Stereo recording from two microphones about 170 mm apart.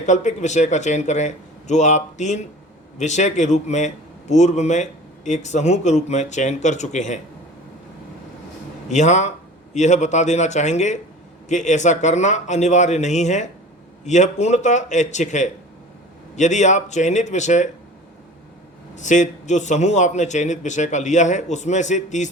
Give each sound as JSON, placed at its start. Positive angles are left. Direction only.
{"t": 0.0, "sound": "a man's voice", "side_deg": 45}
{"t": 8.9, "sound": "a man's voice", "side_deg": 45}
{"t": 18.9, "sound": "a man's voice", "side_deg": 45}